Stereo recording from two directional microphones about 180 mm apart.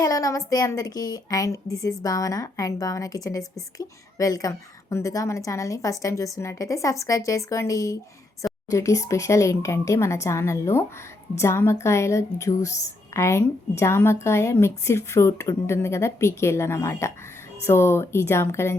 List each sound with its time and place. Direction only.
0.0 s a woman's voice: 20° left (ahead or behind)